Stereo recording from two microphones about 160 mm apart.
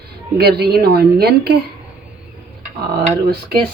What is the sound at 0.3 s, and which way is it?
A woman's voice, 90° right.